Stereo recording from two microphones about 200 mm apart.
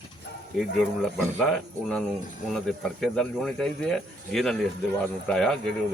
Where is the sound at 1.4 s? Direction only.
5° left (ahead or behind).